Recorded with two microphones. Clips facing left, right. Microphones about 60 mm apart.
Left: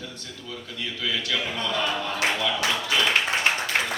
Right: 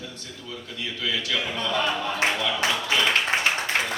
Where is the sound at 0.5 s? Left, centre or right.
Centre.